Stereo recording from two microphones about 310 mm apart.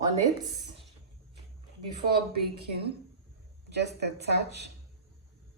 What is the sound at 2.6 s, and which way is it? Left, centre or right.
A woman's voice, right.